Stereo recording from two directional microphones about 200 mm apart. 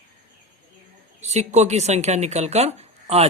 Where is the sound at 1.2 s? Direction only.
35° right (ahead or behind).